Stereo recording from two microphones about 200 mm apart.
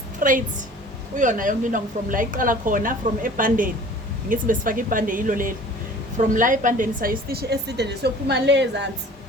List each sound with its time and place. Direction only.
0.2 s a woman's voice: 40° right (ahead or behind); by 8.9 s 60° right (ahead or behind)